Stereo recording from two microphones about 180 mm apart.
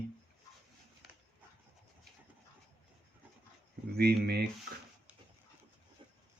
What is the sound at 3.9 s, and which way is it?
Speech, 60° right (ahead or behind).